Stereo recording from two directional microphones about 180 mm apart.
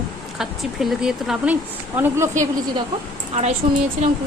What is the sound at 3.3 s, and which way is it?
Speech, 40° right (ahead or behind).